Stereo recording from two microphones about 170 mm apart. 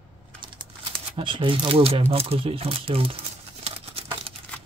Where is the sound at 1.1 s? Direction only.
30° right (ahead or behind).